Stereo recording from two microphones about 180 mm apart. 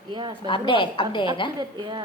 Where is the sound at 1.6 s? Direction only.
25° right (ahead or behind).